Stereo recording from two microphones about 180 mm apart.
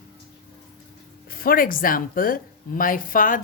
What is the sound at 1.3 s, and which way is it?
Speech, 55° left (ahead or behind).